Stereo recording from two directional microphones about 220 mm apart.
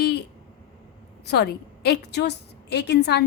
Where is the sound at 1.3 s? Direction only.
50° left (ahead or behind).